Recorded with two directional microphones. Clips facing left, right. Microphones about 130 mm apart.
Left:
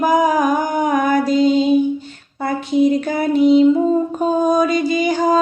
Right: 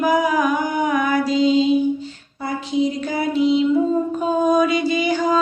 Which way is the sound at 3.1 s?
50° left (ahead or behind).